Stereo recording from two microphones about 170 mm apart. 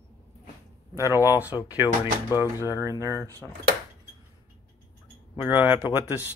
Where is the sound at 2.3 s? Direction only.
20° left (ahead or behind).